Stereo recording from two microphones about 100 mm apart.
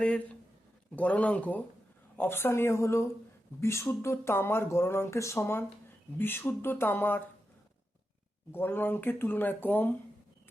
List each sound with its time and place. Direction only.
0.0 s a sound: 15° left (ahead or behind)
0.9 s speech: 15° left (ahead or behind)
8.5 s speech: 20° left (ahead or behind)